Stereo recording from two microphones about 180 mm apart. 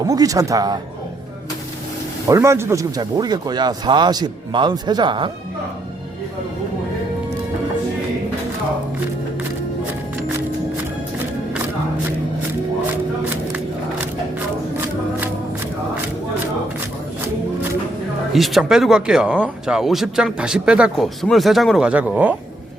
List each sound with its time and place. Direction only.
0.0 s speech: 20° right (ahead or behind)
2.3 s speech: 15° right (ahead or behind)
18.3 s speech: centre (ahead or behind)